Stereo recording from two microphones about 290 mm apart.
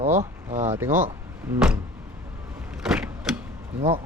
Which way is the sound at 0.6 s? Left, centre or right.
Centre.